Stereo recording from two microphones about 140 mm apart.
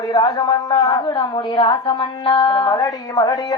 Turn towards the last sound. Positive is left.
turn(degrees=25)  # may be behind; listen again after turning